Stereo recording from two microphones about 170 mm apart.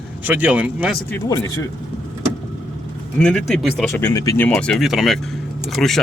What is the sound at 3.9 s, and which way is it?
Speech, 15° left (ahead or behind).